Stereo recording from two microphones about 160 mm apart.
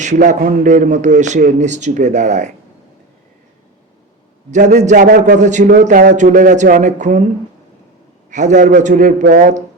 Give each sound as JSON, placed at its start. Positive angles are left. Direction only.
{"t": 0.0, "sound": "speech", "side_deg": -50}
{"t": 0.3, "sound": "a man's voice", "side_deg": -75}
{"t": 0.7, "sound": "speech", "side_deg": -50}
{"t": 4.5, "sound": "speech", "side_deg": -50}
{"t": 5.4, "sound": "speech", "side_deg": -50}
{"t": 8.3, "sound": "a man's voice", "side_deg": -50}